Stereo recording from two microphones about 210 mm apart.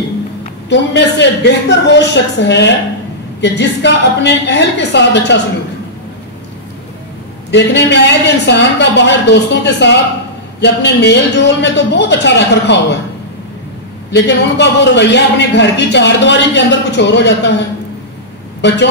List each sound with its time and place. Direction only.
0.7 s a man's voice: 55° left (ahead or behind)
7.5 s a man's voice: 55° left (ahead or behind)
14.1 s a man's voice: 55° left (ahead or behind)
18.6 s a man's voice: 55° left (ahead or behind)